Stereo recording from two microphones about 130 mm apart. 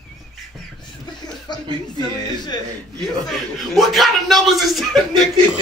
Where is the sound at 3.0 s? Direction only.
Centre (ahead or behind).